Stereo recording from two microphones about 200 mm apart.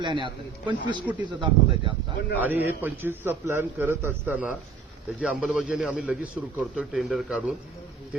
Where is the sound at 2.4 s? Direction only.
10° right (ahead or behind).